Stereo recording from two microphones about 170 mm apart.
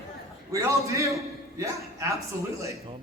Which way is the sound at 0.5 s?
20° right (ahead or behind).